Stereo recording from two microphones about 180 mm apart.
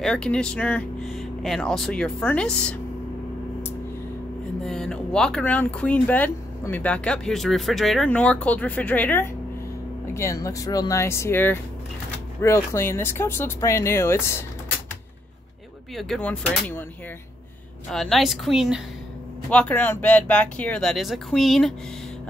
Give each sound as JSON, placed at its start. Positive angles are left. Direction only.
{"t": 0.0, "sound": "speech", "side_deg": 5}
{"t": 4.6, "sound": "speech", "side_deg": 5}
{"t": 16.0, "sound": "speech", "side_deg": 5}
{"t": 17.9, "sound": "speech", "side_deg": 0}